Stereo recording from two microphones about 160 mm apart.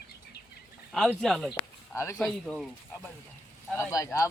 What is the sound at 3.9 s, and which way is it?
Speech, 20° left (ahead or behind).